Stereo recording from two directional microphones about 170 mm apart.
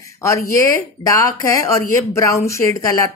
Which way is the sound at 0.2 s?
15° left (ahead or behind).